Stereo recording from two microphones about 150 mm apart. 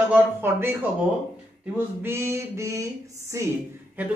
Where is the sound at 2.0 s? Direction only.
15° right (ahead or behind).